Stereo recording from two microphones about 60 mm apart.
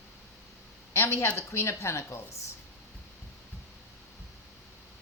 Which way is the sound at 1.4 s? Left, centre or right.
Left.